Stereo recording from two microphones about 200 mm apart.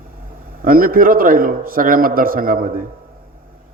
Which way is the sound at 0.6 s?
45° right (ahead or behind).